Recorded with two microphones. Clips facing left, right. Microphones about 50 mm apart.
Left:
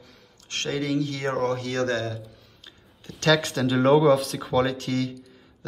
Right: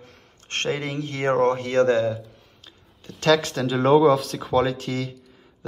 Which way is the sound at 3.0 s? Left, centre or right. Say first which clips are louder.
Right 2 dB; centre.